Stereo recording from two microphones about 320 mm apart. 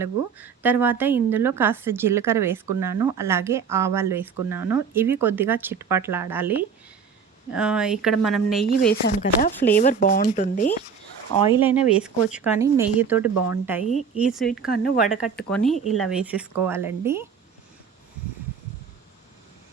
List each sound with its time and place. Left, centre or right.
0.0 s speech: centre
8.9 s speech: left; by 11.6 s centre
11.6 s speech: centre
14.6 s speech: left
15.4 s speech: centre